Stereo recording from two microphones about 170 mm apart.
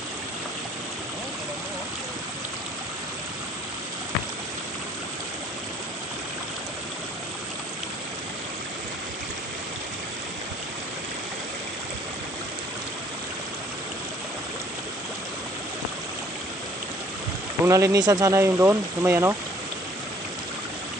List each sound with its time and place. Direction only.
17.7 s speech: 15° right (ahead or behind)